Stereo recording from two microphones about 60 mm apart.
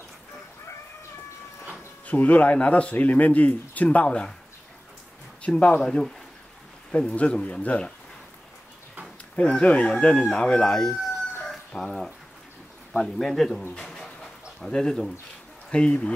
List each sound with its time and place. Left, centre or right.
2.0 s a man's voice: left
5.6 s a man's voice: left
5.9 s a man's voice: centre
9.4 s speech: centre
11.4 s chicken: centre
12.9 s speech: centre
13.7 s pigeon: centre
14.6 s speech: centre